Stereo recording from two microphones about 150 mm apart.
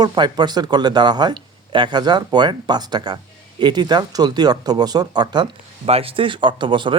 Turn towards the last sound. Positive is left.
turn(degrees=-35)  # may be behind; listen again after turning